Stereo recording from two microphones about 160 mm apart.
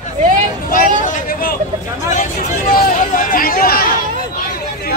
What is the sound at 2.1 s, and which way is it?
Speech, 50° left (ahead or behind).